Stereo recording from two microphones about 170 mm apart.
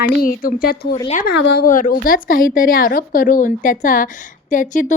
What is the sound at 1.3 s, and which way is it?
Speech, 80° left.